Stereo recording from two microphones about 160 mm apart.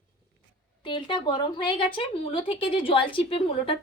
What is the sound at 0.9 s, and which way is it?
A woman's voice, 30° left (ahead or behind).